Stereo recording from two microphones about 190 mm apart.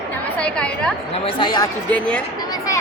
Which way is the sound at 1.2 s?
25° left (ahead or behind).